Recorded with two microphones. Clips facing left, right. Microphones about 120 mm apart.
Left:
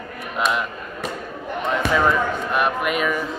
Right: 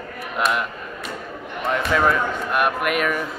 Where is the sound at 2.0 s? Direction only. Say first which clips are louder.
Even; 5° right (ahead or behind).